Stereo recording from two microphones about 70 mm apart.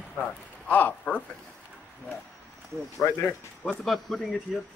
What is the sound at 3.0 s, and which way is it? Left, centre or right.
Speech, left.